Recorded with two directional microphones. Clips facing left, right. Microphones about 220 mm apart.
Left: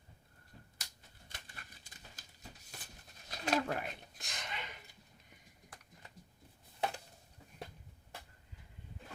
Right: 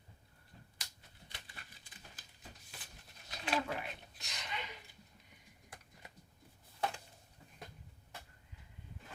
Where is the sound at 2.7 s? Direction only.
40° left (ahead or behind).